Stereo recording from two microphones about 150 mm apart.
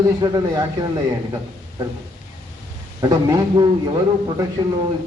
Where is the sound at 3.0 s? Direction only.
25° right (ahead or behind).